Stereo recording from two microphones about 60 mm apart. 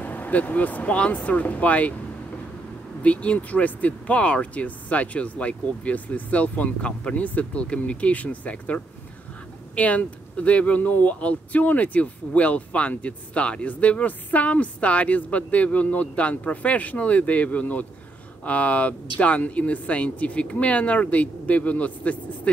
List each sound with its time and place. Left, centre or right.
0.0 s speech: left
3.0 s speech: left